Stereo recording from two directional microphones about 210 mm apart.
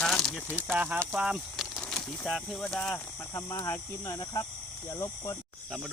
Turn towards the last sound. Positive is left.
turn(degrees=15)  # may be behind; listen again after turning